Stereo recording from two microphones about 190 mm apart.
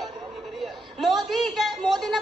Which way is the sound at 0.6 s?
Centre (ahead or behind).